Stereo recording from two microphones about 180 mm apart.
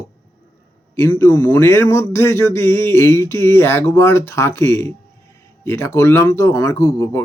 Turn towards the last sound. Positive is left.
turn(degrees=15)  # may be behind; listen again after turning